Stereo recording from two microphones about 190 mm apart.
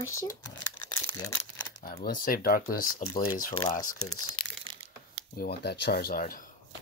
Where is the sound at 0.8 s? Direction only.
20° left (ahead or behind).